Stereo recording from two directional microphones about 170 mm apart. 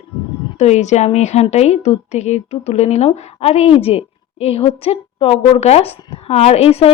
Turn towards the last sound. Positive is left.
turn(degrees=35)  # may be behind; listen again after turning